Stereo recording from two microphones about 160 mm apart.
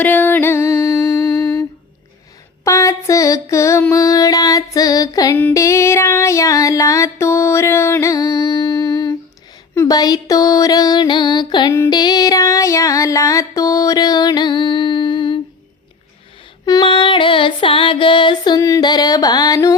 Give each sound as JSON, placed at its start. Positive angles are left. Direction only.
{"t": 0.0, "sound": "music", "side_deg": 10}
{"t": 2.6, "sound": "a sound", "side_deg": 20}
{"t": 5.4, "sound": "child singing", "side_deg": 15}
{"t": 9.7, "sound": "a sound", "side_deg": 20}
{"t": 11.9, "sound": "music", "side_deg": 25}
{"t": 16.6, "sound": "female singing", "side_deg": 25}